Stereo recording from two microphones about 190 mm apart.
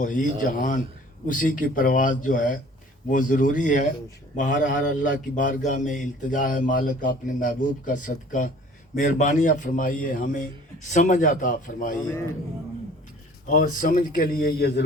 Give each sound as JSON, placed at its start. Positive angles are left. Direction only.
{"t": 0.0, "sound": "speech", "side_deg": 45}
{"t": 13.5, "sound": "speech", "side_deg": 45}